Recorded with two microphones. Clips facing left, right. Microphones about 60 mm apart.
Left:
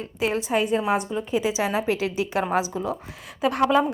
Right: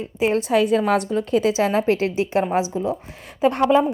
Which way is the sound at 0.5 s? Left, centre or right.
Right.